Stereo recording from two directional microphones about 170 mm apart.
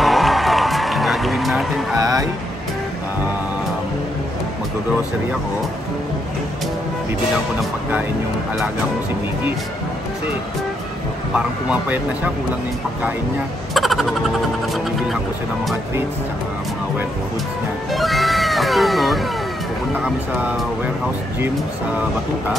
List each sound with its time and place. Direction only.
0.0 s music: centre (ahead or behind)
2.0 s speech: 20° right (ahead or behind)
11.3 s speech: 10° right (ahead or behind)
13.7 s a sound: centre (ahead or behind)
17.9 s speech: centre (ahead or behind)
20.3 s speech: 10° right (ahead or behind)